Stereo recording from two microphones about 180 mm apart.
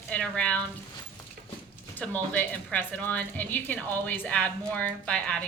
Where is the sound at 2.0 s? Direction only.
5° left (ahead or behind).